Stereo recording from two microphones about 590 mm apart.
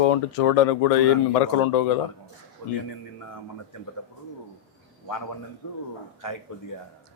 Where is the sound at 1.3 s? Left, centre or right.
Left.